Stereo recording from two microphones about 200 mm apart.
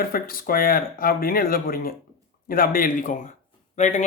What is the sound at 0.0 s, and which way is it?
Speech, 45° left (ahead or behind).